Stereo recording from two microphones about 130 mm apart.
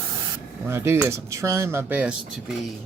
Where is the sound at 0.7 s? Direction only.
20° right (ahead or behind).